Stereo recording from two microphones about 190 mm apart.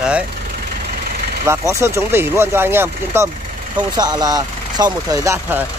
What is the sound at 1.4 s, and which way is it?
Speech, 15° right (ahead or behind).